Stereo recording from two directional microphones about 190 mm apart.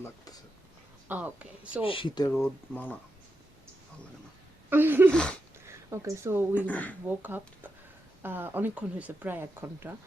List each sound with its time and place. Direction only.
0.0 s speech: 20° left (ahead or behind)
1.0 s speech: 10° right (ahead or behind)
1.8 s speech: 30° left (ahead or behind)
2.3 s speech: 10° left (ahead or behind)
4.7 s speech: 10° right (ahead or behind)
5.1 s a sound: 5° left (ahead or behind)
5.6 s a woman's voice: 15° right (ahead or behind)
6.7 s speech: 10° left (ahead or behind)
7.2 s speech: 10° right (ahead or behind)